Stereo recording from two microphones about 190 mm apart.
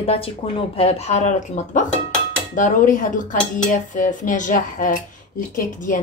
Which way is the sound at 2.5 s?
40° left (ahead or behind).